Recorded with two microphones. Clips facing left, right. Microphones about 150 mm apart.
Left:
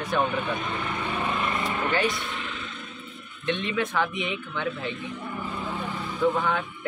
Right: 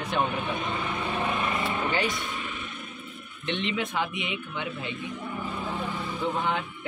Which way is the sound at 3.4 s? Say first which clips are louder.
Left 2 dB; 20° right (ahead or behind).